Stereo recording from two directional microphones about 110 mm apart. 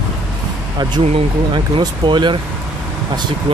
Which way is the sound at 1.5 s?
45° right (ahead or behind).